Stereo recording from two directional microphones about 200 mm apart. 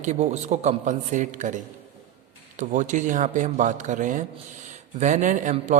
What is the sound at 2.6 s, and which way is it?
Speech, 40° right (ahead or behind).